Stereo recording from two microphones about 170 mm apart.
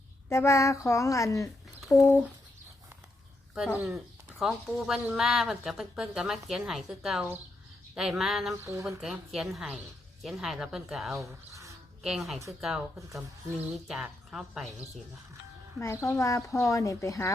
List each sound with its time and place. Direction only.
0.3 s speech: 15° left (ahead or behind)
3.8 s speech: centre (ahead or behind)
8.6 s speech: 20° right (ahead or behind)
9.0 s speech: centre (ahead or behind)
15.8 s speech: 15° left (ahead or behind)